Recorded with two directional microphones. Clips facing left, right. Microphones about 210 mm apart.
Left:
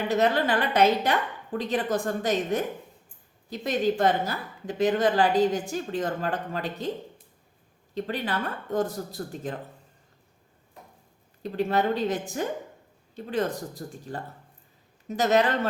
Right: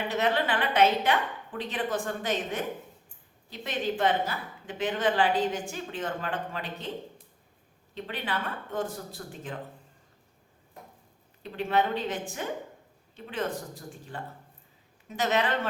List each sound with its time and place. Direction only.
0.1 s a woman's voice: 40° left (ahead or behind)
7.9 s a woman's voice: 40° left (ahead or behind)
11.4 s a woman's voice: 40° left (ahead or behind)